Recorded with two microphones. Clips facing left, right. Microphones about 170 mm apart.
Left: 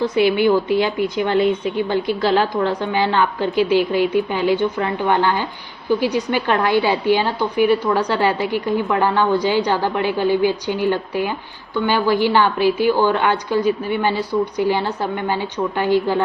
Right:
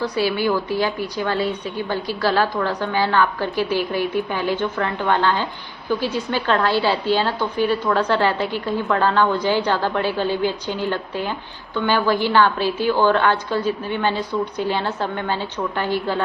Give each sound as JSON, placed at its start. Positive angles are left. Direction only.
{"t": 0.0, "sound": "a woman's voice", "side_deg": 20}
{"t": 15.8, "sound": "a woman's voice", "side_deg": 15}